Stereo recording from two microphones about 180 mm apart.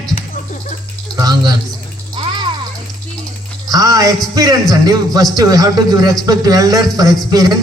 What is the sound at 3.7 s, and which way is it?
A man's voice, 20° right (ahead or behind).